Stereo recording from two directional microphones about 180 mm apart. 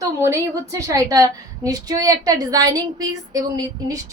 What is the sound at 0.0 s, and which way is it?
A woman's voice, 15° right (ahead or behind).